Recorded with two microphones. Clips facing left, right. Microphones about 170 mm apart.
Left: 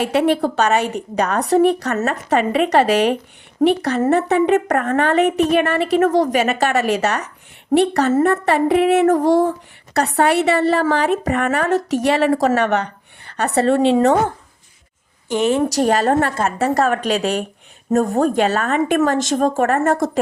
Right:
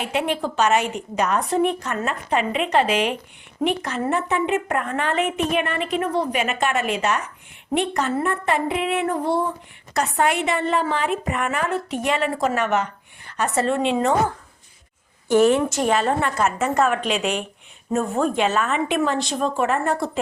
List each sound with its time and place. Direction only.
0.0 s a woman's voice: 40° left (ahead or behind)
6.1 s female singing: 90° left
6.3 s a woman's voice: 40° left (ahead or behind)
9.0 s female singing: 90° left
9.9 s a woman's voice: 35° left (ahead or behind)
15.3 s a woman's voice: 20° left (ahead or behind)
15.5 s a woman's voice: 35° left (ahead or behind)